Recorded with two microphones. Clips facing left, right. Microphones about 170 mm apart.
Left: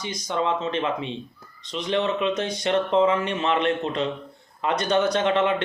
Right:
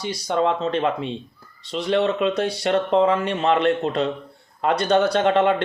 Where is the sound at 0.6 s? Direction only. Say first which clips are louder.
Right 4 dB; 45° right (ahead or behind).